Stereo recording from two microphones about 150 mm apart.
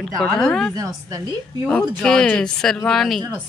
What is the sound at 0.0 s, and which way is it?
Speech, 5° left (ahead or behind).